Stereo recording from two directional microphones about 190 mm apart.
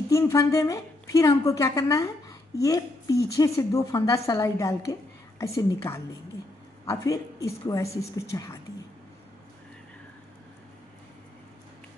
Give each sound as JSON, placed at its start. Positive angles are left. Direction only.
{"t": 0.1, "sound": "a woman's voice", "side_deg": 15}